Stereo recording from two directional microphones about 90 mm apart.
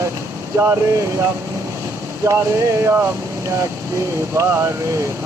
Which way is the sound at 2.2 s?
35° right (ahead or behind).